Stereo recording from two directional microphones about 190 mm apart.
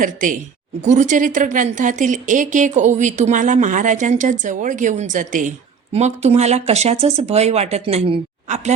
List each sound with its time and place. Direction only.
0.0 s a woman's voice: 45° right (ahead or behind)